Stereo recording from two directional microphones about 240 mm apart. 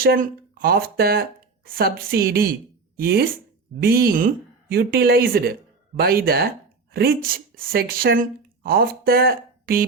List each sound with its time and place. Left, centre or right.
0.0 s speech: right